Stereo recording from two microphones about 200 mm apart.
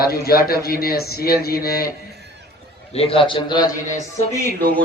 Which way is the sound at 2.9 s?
30° left (ahead or behind).